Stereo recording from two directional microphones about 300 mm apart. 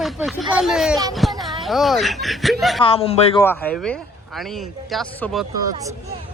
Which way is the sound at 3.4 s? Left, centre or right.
Centre.